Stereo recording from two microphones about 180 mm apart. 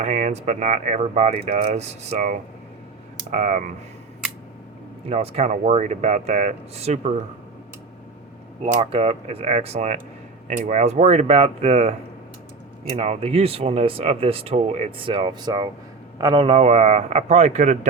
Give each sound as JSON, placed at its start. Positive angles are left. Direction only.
{"t": 0.0, "sound": "speech", "side_deg": -40}
{"t": 5.0, "sound": "speech", "side_deg": -35}
{"t": 8.8, "sound": "speech", "side_deg": -30}